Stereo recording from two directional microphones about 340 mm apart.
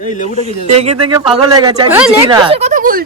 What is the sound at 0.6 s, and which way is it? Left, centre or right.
Speech, centre.